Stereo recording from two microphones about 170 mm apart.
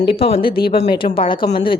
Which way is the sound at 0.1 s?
30° left (ahead or behind).